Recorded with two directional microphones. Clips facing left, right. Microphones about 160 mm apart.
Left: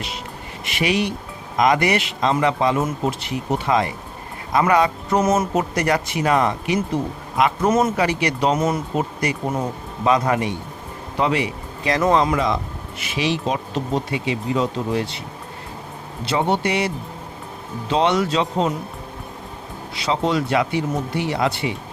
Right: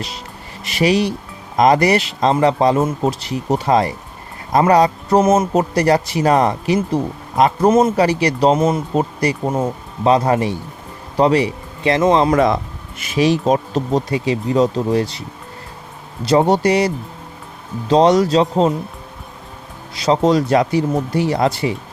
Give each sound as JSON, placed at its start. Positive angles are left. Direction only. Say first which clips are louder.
{"t": 0.6, "sound": "speech", "louder": "right 5 dB", "side_deg": -35}
{"t": 5.2, "sound": "speech", "louder": "right 3 dB", "side_deg": -25}
{"t": 7.7, "sound": "speech", "louder": "right 5 dB", "side_deg": -25}
{"t": 13.0, "sound": "speech", "louder": "right 7 dB", "side_deg": -45}
{"t": 16.2, "sound": "speech", "louder": "right 7 dB", "side_deg": -40}
{"t": 20.0, "sound": "speech", "louder": "right 6 dB", "side_deg": -40}